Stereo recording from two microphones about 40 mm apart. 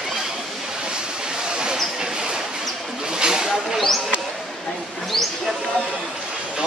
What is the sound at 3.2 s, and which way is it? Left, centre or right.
Snake, centre.